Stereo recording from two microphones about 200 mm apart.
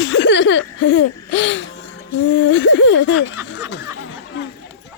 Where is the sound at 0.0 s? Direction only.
65° left (ahead or behind).